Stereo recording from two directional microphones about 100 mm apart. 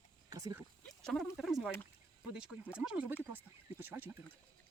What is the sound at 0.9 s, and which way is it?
Speech, 5° left (ahead or behind).